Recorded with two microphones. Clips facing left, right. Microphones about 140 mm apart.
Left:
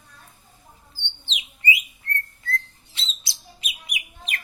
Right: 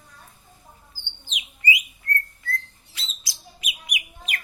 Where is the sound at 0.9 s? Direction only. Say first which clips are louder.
Left 3 dB; 30° left (ahead or behind).